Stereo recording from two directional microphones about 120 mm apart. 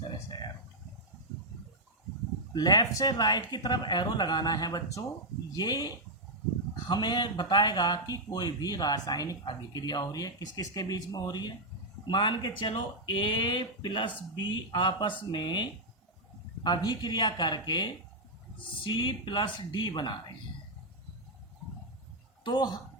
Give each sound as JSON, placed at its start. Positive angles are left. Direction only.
{"t": 2.5, "sound": "speech", "side_deg": 35}
{"t": 22.4, "sound": "speech", "side_deg": 35}